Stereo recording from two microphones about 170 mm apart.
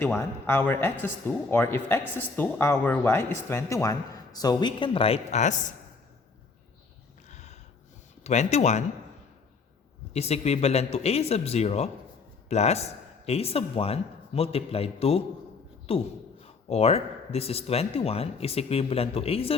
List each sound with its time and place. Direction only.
0.0 s speech: 10° left (ahead or behind); by 5.7 s 45° left (ahead or behind)
7.3 s a sound: 40° left (ahead or behind)
8.2 s speech: 40° left (ahead or behind)
10.1 s speech: 40° left (ahead or behind)